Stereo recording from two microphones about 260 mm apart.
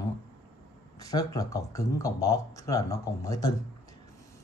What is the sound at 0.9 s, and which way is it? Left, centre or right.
Speech, centre.